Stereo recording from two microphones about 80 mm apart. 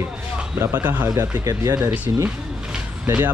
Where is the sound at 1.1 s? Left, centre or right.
Right.